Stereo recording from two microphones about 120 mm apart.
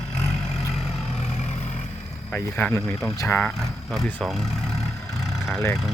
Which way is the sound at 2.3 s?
10° left (ahead or behind).